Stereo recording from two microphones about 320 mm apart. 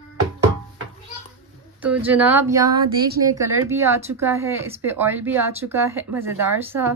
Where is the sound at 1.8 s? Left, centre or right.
Centre.